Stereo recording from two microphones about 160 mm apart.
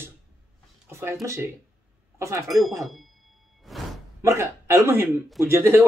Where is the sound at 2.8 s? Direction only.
Centre (ahead or behind).